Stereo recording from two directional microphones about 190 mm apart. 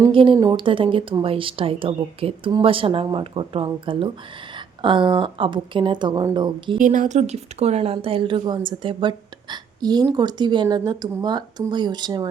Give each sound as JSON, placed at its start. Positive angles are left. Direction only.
{"t": 0.0, "sound": "speech", "side_deg": -25}
{"t": 6.7, "sound": "speech", "side_deg": -45}